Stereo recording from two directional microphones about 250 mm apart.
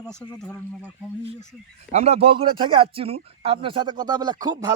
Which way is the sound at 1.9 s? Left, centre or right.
Right.